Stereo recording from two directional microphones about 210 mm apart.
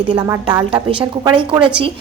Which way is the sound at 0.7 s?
25° right (ahead or behind).